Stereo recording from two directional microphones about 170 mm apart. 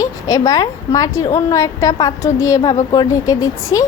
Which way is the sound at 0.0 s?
20° left (ahead or behind).